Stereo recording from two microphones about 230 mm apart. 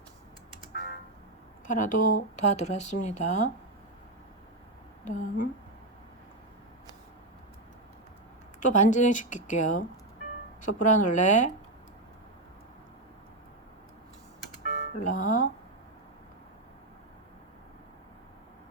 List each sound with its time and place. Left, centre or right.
1.6 s speech: left
5.0 s speech: left
8.6 s speech: left
14.9 s speech: left